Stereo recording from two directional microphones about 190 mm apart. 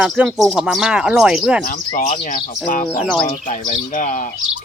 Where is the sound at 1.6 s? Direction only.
45° left (ahead or behind).